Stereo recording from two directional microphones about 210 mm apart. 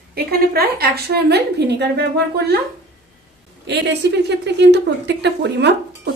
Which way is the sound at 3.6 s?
55° right (ahead or behind).